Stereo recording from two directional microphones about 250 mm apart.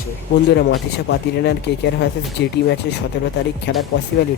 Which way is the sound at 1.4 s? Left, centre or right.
Left.